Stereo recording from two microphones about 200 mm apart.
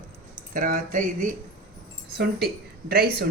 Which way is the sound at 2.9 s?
50° right (ahead or behind).